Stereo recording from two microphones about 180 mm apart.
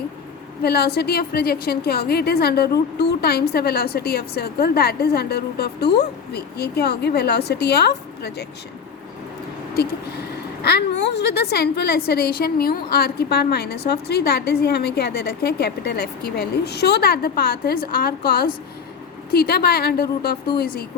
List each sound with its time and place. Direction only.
0.6 s a woman's voice: 60° left (ahead or behind)
10.6 s a woman's voice: 65° left (ahead or behind)